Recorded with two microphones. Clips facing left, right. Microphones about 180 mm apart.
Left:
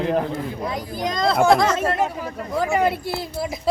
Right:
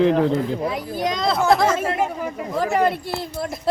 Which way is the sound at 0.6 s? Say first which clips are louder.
Right 2 dB; 5° right (ahead or behind).